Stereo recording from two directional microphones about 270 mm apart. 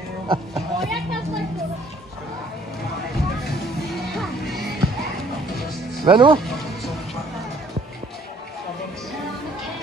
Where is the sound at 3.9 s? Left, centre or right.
Centre.